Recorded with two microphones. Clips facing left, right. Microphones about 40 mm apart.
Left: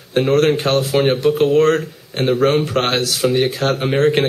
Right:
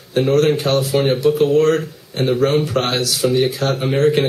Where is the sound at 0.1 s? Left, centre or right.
Left.